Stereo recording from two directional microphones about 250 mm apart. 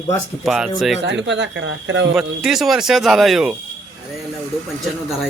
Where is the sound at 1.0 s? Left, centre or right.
Right.